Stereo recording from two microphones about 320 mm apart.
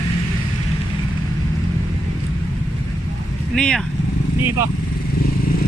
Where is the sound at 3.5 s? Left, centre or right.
Centre.